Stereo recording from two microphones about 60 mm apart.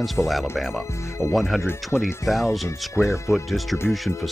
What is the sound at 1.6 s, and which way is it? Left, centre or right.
Speech, left.